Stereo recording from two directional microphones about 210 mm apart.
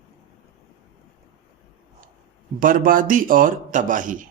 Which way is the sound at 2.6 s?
40° right (ahead or behind).